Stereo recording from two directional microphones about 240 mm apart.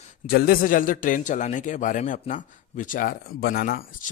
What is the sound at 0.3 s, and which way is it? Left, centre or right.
A man's voice, left.